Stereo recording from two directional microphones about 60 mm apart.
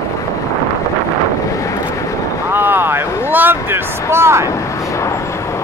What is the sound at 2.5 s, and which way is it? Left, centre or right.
Vehicle, right.